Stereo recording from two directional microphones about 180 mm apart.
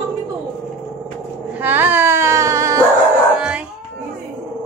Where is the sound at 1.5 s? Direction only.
10° right (ahead or behind).